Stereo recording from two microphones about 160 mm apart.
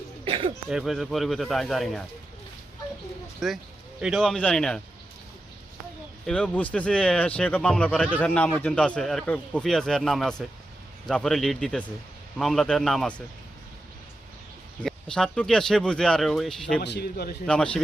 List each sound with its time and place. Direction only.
0.3 s throat clearing: 35° right (ahead or behind)
0.7 s speech: centre (ahead or behind)
3.4 s speech: centre (ahead or behind)
6.2 s speech: 5° left (ahead or behind)
14.8 s speech: 5° left (ahead or behind)
16.8 s a man's voice: 85° left
17.4 s speech: 5° left (ahead or behind)